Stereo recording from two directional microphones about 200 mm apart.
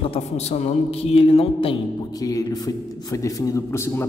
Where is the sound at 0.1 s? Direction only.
35° left (ahead or behind).